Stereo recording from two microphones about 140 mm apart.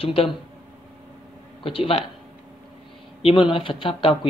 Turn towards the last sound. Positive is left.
turn(degrees=40)  # may be behind; listen again after turning